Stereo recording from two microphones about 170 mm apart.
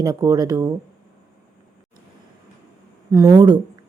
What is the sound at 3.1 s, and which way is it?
Speech, 20° right (ahead or behind).